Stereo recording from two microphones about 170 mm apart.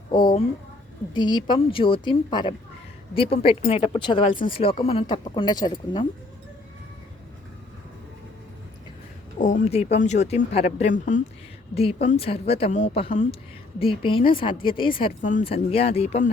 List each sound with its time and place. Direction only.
0.1 s a woman's voice: 30° left (ahead or behind)
9.6 s speech: 40° left (ahead or behind)
11.7 s a woman's voice: 35° left (ahead or behind)
15.2 s speech: 50° left (ahead or behind)
15.4 s speech: 35° left (ahead or behind)